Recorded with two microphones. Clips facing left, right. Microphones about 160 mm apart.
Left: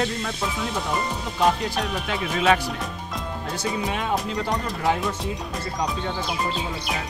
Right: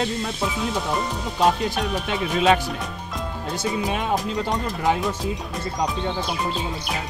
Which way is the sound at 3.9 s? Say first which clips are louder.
Right 2 dB; 20° right (ahead or behind).